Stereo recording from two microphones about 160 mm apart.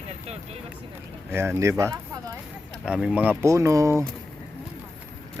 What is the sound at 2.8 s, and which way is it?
Speech, 5° right (ahead or behind).